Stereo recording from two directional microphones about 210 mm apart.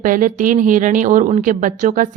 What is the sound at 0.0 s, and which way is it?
Speech, 40° right (ahead or behind).